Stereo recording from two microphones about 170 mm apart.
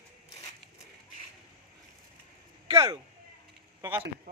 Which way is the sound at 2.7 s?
20° right (ahead or behind).